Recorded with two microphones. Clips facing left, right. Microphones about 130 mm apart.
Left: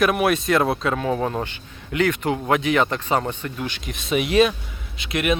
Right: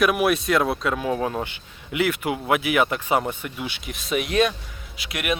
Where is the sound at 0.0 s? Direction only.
Centre (ahead or behind).